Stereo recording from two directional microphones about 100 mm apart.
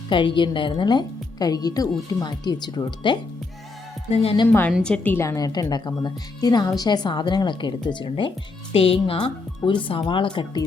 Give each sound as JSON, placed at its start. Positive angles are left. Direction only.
{"t": 0.1, "sound": "a woman's voice", "side_deg": 55}
{"t": 4.1, "sound": "a woman's voice", "side_deg": 75}
{"t": 4.8, "sound": "a woman's voice", "side_deg": 10}
{"t": 5.1, "sound": "a woman's voice", "side_deg": 30}
{"t": 5.5, "sound": "a woman's voice", "side_deg": 45}
{"t": 8.7, "sound": "a woman's voice", "side_deg": 70}
{"t": 9.1, "sound": "speech", "side_deg": 55}